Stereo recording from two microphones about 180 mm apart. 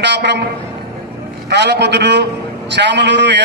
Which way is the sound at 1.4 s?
70° right (ahead or behind).